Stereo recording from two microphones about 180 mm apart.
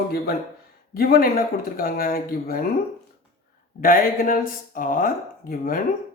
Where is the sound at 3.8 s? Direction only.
50° left (ahead or behind).